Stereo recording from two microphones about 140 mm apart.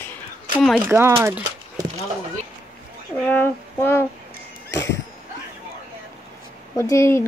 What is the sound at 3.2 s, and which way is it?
Speech, 15° left (ahead or behind).